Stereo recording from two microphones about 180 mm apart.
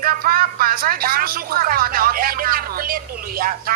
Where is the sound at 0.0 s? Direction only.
55° right (ahead or behind).